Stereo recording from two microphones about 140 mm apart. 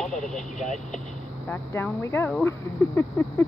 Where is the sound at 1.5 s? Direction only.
15° left (ahead or behind).